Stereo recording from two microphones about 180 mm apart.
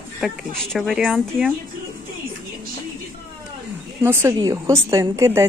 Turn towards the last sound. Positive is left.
turn(degrees=-15)  # may be behind; listen again after turning